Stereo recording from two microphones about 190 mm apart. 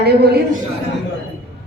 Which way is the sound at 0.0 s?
60° right (ahead or behind).